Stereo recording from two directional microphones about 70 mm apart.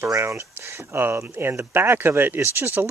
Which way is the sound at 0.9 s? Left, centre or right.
Right.